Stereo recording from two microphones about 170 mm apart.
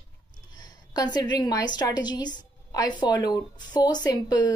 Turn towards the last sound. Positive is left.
turn(degrees=25)  # may be behind; listen again after turning